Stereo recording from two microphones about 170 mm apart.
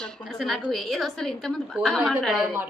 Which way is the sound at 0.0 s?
Centre (ahead or behind).